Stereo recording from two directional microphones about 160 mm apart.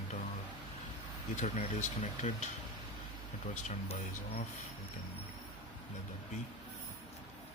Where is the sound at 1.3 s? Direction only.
50° left (ahead or behind).